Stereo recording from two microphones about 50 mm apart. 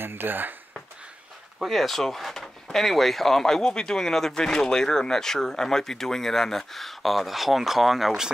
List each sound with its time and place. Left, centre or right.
0.0 s speech: right
1.6 s speech: centre